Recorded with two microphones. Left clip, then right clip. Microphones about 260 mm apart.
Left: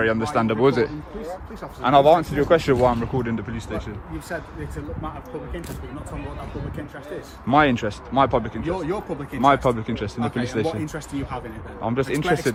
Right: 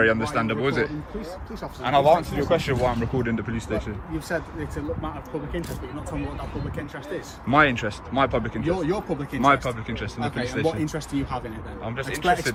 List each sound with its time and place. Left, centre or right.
0.0 s speech: centre; by 2.9 s left
2.9 s speech: centre
7.5 s speech: centre
10.8 s speech: centre
11.9 s speech: left